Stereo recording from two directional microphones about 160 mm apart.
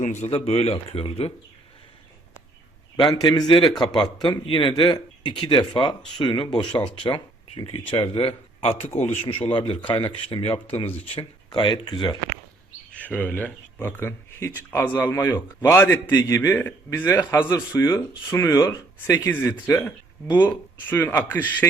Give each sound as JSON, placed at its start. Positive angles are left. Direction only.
{"t": 0.0, "sound": "speech", "side_deg": 45}
{"t": 0.3, "sound": "speech", "side_deg": 35}
{"t": 3.2, "sound": "a man's voice", "side_deg": 25}
{"t": 12.9, "sound": "a man's voice", "side_deg": 10}